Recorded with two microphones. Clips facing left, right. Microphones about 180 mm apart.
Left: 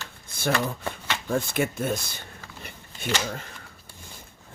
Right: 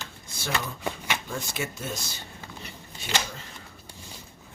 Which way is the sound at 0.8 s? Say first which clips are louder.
Right 1 dB; 15° right (ahead or behind).